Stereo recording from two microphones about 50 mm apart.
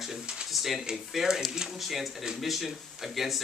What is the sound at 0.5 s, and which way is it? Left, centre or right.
Speech, centre.